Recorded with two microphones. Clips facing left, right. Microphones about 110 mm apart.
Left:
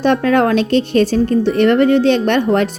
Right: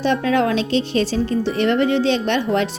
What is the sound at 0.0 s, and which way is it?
A woman's voice, 55° left (ahead or behind).